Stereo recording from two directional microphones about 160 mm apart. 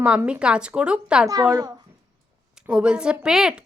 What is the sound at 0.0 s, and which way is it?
A woman's voice, 5° right (ahead or behind).